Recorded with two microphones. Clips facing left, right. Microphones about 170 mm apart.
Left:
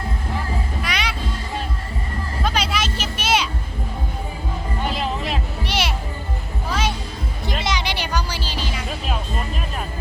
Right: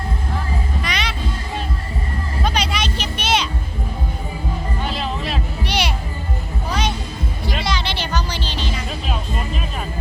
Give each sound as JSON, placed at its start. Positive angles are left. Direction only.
{"t": 0.8, "sound": "music", "side_deg": 10}
{"t": 2.4, "sound": "a sound", "side_deg": 5}
{"t": 4.9, "sound": "music", "side_deg": 15}
{"t": 5.6, "sound": "music", "side_deg": 0}
{"t": 7.6, "sound": "music", "side_deg": 15}